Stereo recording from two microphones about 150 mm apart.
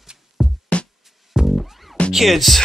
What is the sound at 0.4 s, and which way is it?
Music, 5° right (ahead or behind).